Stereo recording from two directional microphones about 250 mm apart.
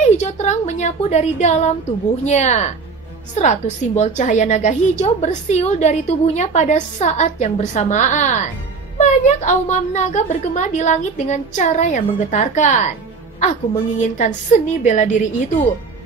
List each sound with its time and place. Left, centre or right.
0.0 s a woman's voice: left